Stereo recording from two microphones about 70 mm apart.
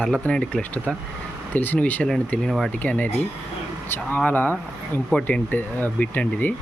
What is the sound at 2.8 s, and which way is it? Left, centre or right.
Speech, left.